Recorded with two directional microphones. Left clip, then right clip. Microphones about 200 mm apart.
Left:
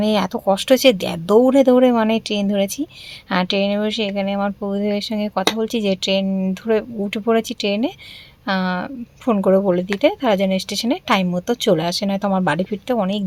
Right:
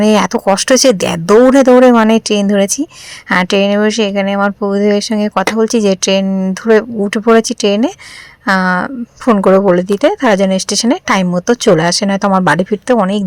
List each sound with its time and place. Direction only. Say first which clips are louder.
0.0 s speech: right 8 dB; 35° right (ahead or behind)